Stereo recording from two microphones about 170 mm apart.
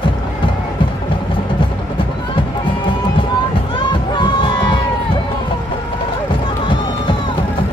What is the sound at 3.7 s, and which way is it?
Crowd, 30° left (ahead or behind).